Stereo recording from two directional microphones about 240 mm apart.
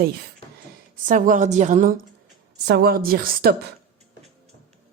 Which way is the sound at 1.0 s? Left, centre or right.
Right.